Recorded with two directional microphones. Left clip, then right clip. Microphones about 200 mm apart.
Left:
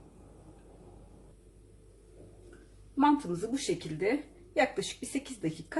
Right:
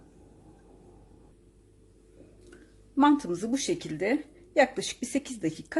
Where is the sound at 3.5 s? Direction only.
50° right (ahead or behind).